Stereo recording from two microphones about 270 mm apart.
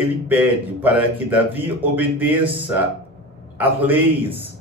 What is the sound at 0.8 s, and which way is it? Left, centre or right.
Speech, centre.